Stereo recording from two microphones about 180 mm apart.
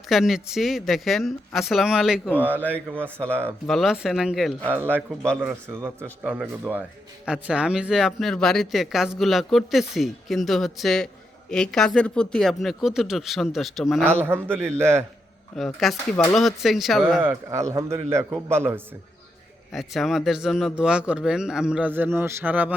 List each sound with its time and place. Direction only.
0.1 s a woman's voice: centre (ahead or behind)
2.6 s speech: 10° left (ahead or behind)
3.2 s speech: 10° right (ahead or behind)
3.7 s a woman's voice: centre (ahead or behind)
14.1 s speech: 10° right (ahead or behind)
15.5 s a woman's voice: centre (ahead or behind)
17.2 s speech: 15° right (ahead or behind)
19.7 s a woman's voice: centre (ahead or behind)